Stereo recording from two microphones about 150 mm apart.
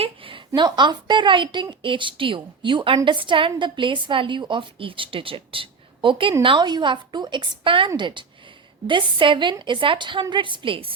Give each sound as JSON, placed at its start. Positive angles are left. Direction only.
{"t": 0.0, "sound": "a woman's voice", "side_deg": -35}